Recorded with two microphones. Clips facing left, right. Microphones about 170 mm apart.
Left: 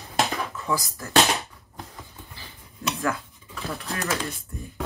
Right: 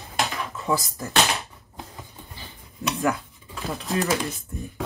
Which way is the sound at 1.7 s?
15° right (ahead or behind).